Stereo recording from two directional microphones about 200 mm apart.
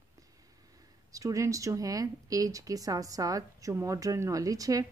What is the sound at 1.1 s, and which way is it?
Speech, 15° right (ahead or behind).